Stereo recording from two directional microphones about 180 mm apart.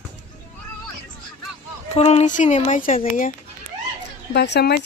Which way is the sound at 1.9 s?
35° left (ahead or behind).